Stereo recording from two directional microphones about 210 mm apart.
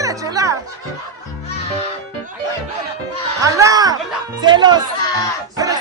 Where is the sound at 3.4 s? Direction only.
15° right (ahead or behind).